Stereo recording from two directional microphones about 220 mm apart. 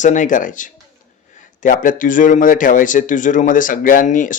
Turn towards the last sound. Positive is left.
turn(degrees=35)  # may be behind; listen again after turning